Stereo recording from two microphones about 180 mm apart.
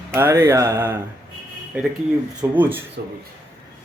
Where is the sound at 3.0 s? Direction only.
65° right (ahead or behind).